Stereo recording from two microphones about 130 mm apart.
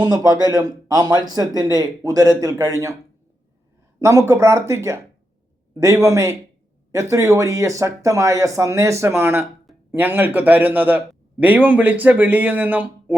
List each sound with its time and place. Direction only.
0.0 s speech: 30° right (ahead or behind)
4.0 s a man's voice: 25° right (ahead or behind)